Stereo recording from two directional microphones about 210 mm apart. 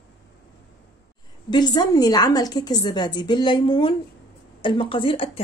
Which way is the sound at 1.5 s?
20° left (ahead or behind).